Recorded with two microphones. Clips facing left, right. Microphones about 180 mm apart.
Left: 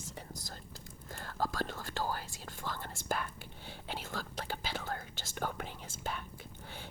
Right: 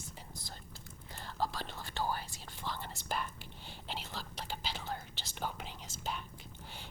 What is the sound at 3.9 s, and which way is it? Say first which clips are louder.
Whispering: left 3 dB; 50° left (ahead or behind).